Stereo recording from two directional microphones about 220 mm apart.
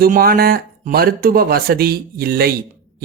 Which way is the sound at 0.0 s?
40° right (ahead or behind).